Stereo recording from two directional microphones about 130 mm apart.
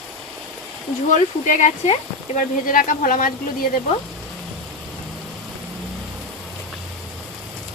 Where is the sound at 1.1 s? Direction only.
65° left (ahead or behind); by 3.3 s 90° left.